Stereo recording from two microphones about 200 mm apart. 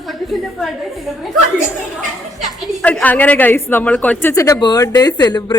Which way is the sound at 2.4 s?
5° left (ahead or behind).